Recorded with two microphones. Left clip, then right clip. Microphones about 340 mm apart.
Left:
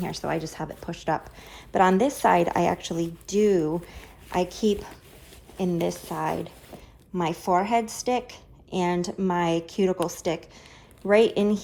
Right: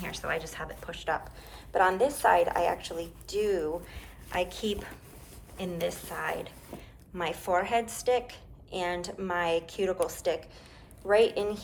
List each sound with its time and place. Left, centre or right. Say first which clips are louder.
0.0 s a woman's voice: left 4 dB; centre